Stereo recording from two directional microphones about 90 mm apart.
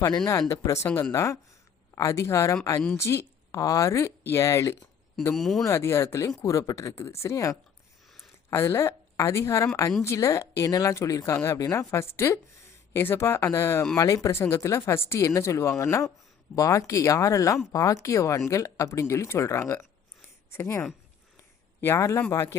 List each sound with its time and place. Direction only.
0.3 s speech: 35° left (ahead or behind)
3.5 s speech: 45° left (ahead or behind)
5.3 s speech: centre (ahead or behind)
5.6 s speech: 30° left (ahead or behind)